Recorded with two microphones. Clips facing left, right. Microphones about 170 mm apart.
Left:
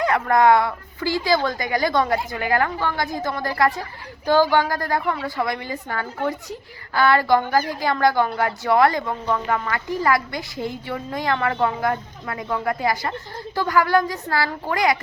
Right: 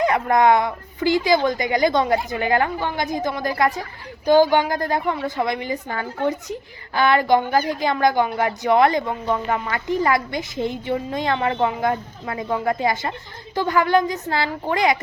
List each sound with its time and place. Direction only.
0.0 s a woman's voice: 20° right (ahead or behind)